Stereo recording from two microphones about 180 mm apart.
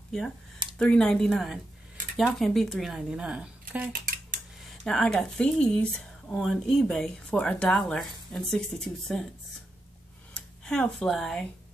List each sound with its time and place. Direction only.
0.7 s speech: 5° left (ahead or behind)
10.3 s speech: 5° left (ahead or behind)